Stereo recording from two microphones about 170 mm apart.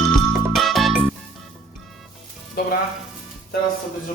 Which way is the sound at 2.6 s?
65° left (ahead or behind).